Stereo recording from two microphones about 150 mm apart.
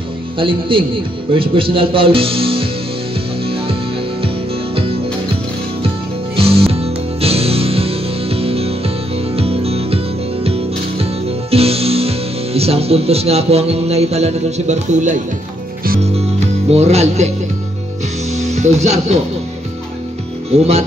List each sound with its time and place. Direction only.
0.4 s speech: 35° right (ahead or behind)
3.4 s music: 40° right (ahead or behind)
6.3 s music: 40° right (ahead or behind)
11.5 s speech: 40° right (ahead or behind)
16.7 s speech: 45° right (ahead or behind)
18.3 s music: 50° right (ahead or behind)
20.5 s speech: 45° right (ahead or behind)